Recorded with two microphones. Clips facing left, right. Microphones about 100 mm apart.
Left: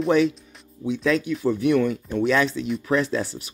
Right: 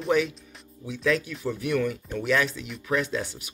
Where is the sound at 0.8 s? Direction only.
25° left (ahead or behind).